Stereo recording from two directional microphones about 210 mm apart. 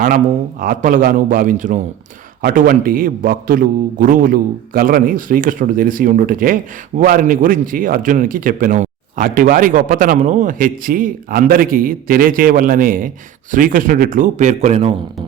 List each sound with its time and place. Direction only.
0.6 s speech: 40° right (ahead or behind)